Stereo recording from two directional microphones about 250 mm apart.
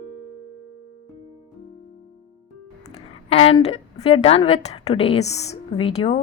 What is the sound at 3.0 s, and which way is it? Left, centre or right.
A woman's voice, left.